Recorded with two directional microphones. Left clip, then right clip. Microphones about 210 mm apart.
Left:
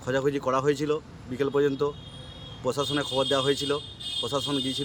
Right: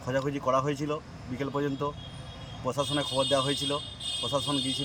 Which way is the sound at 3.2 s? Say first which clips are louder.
Left 1 dB; 20° left (ahead or behind).